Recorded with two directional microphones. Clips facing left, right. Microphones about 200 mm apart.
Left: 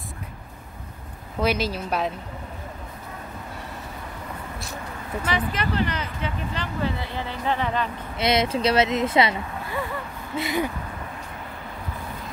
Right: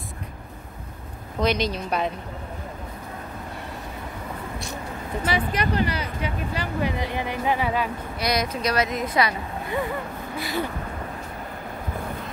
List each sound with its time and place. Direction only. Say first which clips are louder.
1.4 s a woman's voice: right 1 dB; 5° left (ahead or behind)
5.2 s speech: right 2 dB; 10° right (ahead or behind)
8.2 s speech: left 4 dB; 25° left (ahead or behind)